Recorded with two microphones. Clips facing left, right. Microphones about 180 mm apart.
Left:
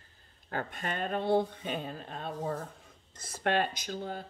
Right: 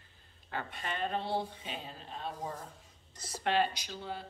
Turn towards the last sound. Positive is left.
turn(degrees=45)  # may be behind; listen again after turning